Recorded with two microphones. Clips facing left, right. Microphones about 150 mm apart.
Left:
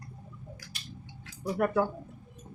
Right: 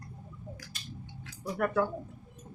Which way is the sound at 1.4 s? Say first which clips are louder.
Left 2 dB; 15° left (ahead or behind).